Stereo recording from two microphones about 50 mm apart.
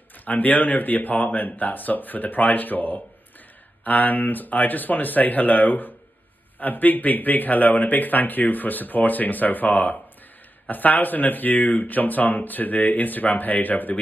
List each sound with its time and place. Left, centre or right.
0.2 s speech: left